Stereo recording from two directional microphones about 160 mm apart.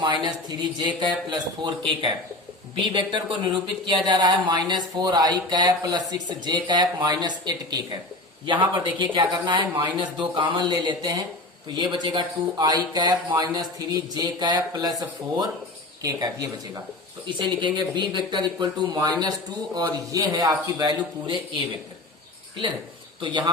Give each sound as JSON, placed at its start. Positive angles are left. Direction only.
{"t": 0.0, "sound": "speech", "side_deg": -25}
{"t": 23.2, "sound": "speech", "side_deg": -30}